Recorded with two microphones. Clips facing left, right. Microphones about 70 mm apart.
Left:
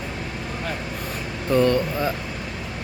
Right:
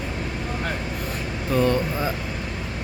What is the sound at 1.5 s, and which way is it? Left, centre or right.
Speech, centre.